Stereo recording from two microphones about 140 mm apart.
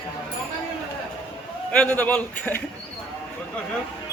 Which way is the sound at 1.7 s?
10° left (ahead or behind).